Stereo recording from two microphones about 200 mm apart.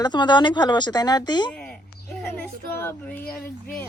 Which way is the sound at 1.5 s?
5° left (ahead or behind).